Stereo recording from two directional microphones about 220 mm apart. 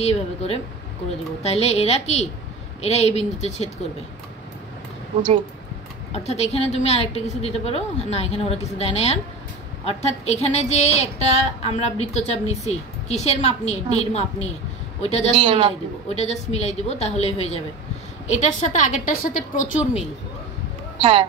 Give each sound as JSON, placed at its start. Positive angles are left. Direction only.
{"t": 0.0, "sound": "a woman's voice", "side_deg": 30}
{"t": 6.1, "sound": "a woman's voice", "side_deg": 30}
{"t": 15.3, "sound": "a woman's voice", "side_deg": -25}
{"t": 16.1, "sound": "a woman's voice", "side_deg": 30}
{"t": 21.0, "sound": "a woman's voice", "side_deg": -25}